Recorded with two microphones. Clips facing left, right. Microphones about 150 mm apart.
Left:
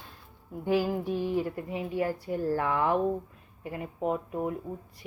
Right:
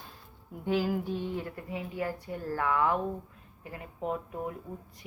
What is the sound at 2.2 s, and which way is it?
Speech, 35° left (ahead or behind).